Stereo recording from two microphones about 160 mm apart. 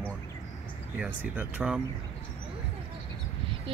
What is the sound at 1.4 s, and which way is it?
Speech, 10° right (ahead or behind).